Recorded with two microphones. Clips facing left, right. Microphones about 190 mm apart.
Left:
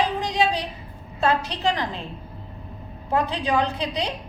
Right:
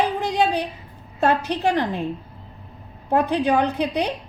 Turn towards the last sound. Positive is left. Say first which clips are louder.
# right 4 dB
turn(degrees=-60)  # may be behind; listen again after turning